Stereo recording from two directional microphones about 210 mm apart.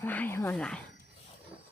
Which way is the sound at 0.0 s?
10° left (ahead or behind).